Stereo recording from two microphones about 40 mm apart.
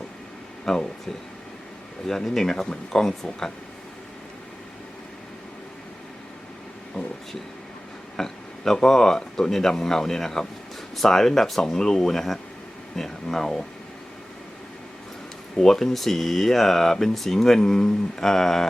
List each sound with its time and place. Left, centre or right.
0.6 s speech: centre
2.0 s speech: centre
8.1 s speech: centre
15.5 s speech: centre